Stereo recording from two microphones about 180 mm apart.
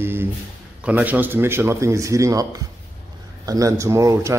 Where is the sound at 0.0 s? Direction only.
10° right (ahead or behind).